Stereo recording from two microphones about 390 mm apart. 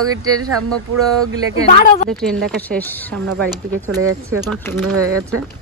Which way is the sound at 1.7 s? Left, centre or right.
Centre.